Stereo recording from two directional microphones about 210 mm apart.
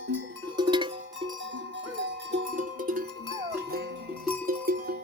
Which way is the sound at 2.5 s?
40° right (ahead or behind).